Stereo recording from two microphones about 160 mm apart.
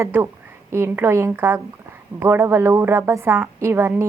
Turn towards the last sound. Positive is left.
turn(degrees=-15)  # may be behind; listen again after turning